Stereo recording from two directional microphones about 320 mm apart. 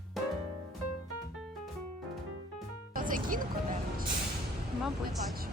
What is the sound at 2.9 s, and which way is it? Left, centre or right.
Music, right.